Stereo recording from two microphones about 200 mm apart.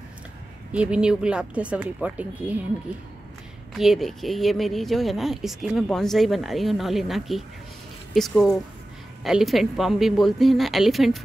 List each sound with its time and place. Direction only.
0.7 s speech: 5° right (ahead or behind)
3.7 s speech: centre (ahead or behind)